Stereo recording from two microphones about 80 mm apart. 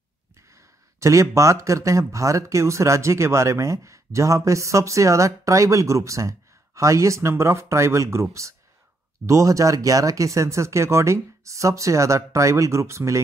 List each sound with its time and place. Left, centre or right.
0.5 s speech: right